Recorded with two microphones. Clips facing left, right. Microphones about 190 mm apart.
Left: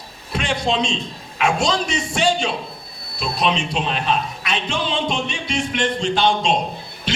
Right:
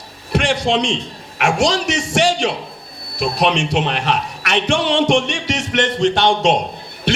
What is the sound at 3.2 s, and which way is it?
A man's voice, 70° right (ahead or behind).